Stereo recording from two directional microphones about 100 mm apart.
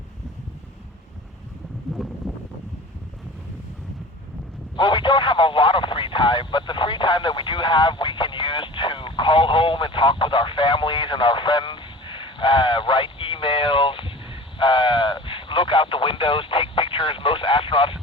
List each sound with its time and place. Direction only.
4.8 s radio: 55° left (ahead or behind)